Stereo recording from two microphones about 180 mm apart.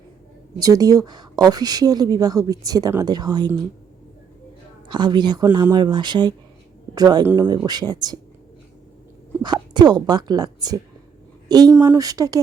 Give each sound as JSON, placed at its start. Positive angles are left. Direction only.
{"t": 0.6, "sound": "speech", "side_deg": -20}
{"t": 4.9, "sound": "speech", "side_deg": -25}
{"t": 9.4, "sound": "speech", "side_deg": -25}